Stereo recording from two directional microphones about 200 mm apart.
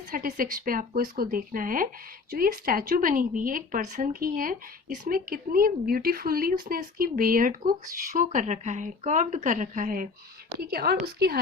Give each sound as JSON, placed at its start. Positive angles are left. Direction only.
{"t": 0.1, "sound": "speech", "side_deg": -45}